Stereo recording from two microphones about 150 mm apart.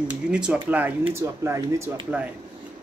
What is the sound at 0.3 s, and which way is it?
Speech, 5° right (ahead or behind).